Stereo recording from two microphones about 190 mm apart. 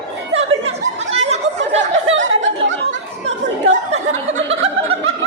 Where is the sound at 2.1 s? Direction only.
80° right.